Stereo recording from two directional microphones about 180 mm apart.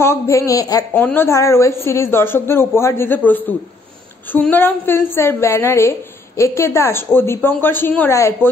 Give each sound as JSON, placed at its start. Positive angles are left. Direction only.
{"t": 0.0, "sound": "a woman's voice", "side_deg": 15}